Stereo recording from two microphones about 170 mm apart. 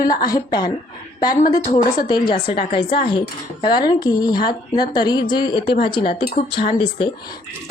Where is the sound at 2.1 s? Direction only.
25° left (ahead or behind).